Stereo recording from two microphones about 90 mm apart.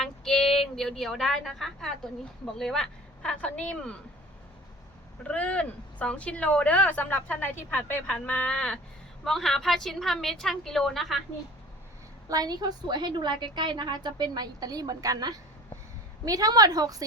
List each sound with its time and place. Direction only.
0.0 s a woman's voice: 5° left (ahead or behind)
5.2 s a woman's voice: 15° left (ahead or behind)
12.3 s a woman's voice: 45° right (ahead or behind)